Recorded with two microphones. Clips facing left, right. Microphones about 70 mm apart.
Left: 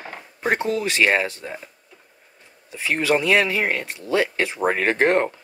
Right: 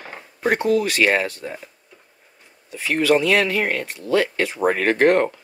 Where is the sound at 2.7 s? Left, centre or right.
Left.